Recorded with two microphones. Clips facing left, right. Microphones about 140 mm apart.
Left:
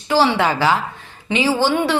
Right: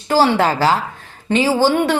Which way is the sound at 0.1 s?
45° right (ahead or behind).